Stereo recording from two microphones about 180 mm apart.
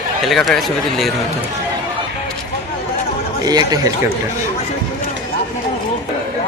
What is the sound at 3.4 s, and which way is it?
Speech, 20° right (ahead or behind).